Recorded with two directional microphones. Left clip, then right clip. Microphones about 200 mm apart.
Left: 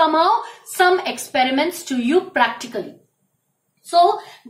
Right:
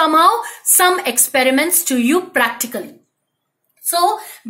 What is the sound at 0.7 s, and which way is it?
A woman's voice, 50° right (ahead or behind).